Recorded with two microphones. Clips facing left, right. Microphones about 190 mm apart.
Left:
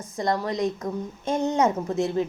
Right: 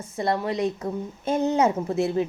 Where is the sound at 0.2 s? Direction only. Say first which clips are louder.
Even; 30° right (ahead or behind).